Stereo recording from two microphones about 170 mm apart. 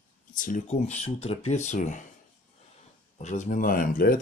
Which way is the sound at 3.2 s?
45° left (ahead or behind).